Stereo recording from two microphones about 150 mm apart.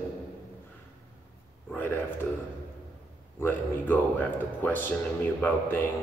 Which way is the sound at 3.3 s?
10° left (ahead or behind).